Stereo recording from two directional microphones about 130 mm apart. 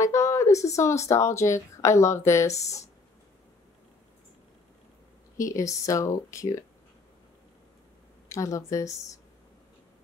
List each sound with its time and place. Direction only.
0.0 s speech: 25° left (ahead or behind)
5.4 s speech: 25° left (ahead or behind)
8.3 s speech: 25° left (ahead or behind)